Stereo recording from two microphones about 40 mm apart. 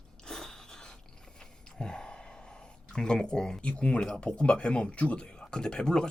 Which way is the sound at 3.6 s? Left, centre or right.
Left.